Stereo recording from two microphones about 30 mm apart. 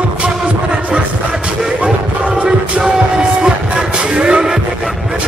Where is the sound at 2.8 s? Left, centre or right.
Right.